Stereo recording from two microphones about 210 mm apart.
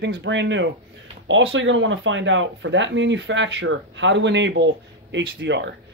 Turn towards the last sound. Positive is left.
turn(degrees=-60)  # may be behind; listen again after turning